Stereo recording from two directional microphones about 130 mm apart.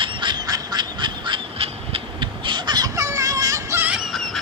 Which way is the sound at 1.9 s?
40° right (ahead or behind).